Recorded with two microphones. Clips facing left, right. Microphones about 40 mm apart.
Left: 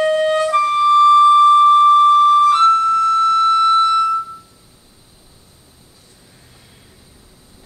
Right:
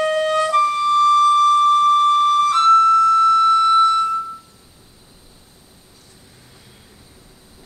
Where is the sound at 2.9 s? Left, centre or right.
Left.